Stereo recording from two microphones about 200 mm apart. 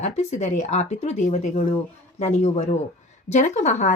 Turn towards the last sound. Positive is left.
turn(degrees=35)  # may be behind; listen again after turning